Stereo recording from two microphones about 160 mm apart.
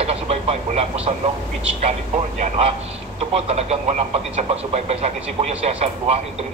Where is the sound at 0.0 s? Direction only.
40° right (ahead or behind).